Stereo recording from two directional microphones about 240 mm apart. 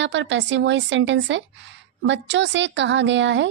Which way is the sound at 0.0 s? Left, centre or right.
Right.